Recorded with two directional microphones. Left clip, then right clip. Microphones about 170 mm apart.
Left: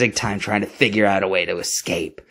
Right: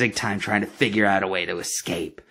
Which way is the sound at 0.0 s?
30° left (ahead or behind).